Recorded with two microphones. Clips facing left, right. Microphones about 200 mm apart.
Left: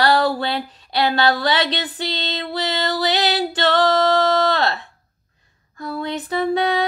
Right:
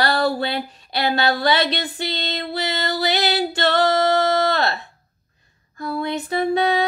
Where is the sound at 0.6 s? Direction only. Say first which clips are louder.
Right 1 dB; 10° right (ahead or behind).